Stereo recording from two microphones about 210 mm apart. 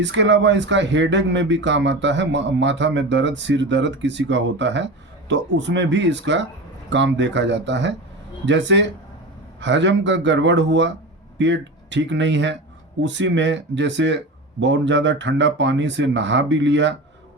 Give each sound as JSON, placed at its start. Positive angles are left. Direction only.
{"t": 0.0, "sound": "speech", "side_deg": -60}